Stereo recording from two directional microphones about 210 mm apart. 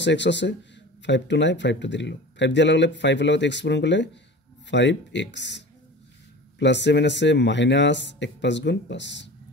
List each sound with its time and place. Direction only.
0.0 s speech: 55° left (ahead or behind)
6.6 s speech: 55° left (ahead or behind)